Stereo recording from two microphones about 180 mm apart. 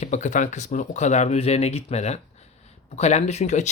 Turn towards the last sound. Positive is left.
turn(degrees=40)  # may be behind; listen again after turning